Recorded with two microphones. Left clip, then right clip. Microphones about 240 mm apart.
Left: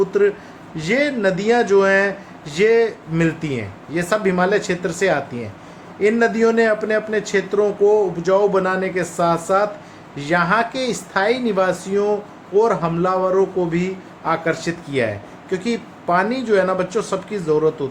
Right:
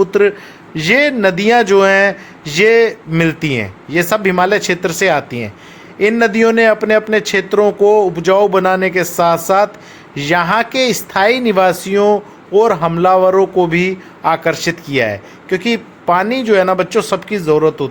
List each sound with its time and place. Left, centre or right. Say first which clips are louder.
0.0 s a man's voice: right 5 dB; right